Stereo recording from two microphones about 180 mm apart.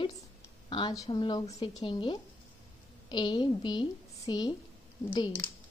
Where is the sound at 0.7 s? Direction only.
25° left (ahead or behind).